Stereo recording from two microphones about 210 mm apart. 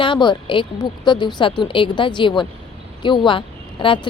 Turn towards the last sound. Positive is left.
turn(degrees=25)  # may be behind; listen again after turning